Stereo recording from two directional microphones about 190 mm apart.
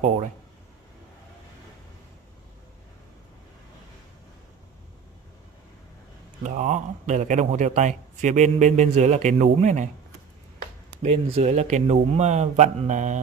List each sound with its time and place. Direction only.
6.4 s a man's voice: 40° right (ahead or behind)
11.0 s a man's voice: 35° right (ahead or behind)